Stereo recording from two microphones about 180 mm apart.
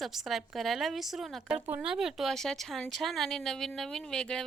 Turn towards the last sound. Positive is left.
turn(degrees=5)  # may be behind; listen again after turning